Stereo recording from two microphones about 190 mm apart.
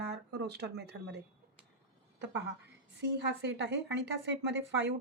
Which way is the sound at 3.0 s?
65° right (ahead or behind).